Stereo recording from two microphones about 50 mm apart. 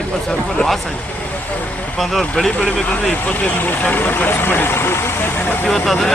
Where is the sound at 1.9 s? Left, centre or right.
Centre.